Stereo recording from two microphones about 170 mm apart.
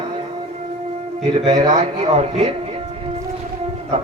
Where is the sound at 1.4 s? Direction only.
40° right (ahead or behind).